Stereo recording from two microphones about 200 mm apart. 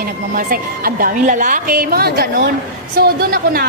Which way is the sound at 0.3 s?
45° right (ahead or behind).